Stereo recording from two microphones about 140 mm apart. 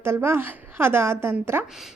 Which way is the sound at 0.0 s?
15° right (ahead or behind).